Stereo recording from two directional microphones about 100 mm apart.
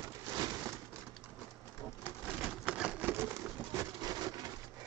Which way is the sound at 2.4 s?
10° right (ahead or behind).